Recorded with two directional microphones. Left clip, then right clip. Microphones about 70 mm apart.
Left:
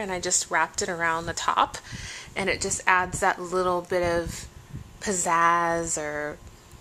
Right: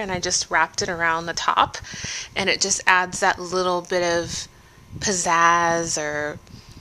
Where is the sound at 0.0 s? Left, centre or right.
Right.